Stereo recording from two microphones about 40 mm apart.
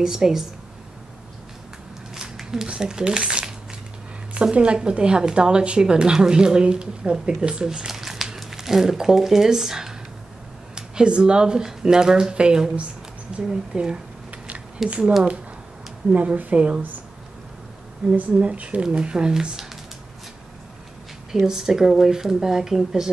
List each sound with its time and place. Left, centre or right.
0.0 s speech: centre
2.3 s a sound: centre
2.7 s speech: right
10.7 s speech: right
14.9 s speech: right
16.2 s speech: right
18.3 s speech: right; by 19.7 s centre
21.5 s speech: centre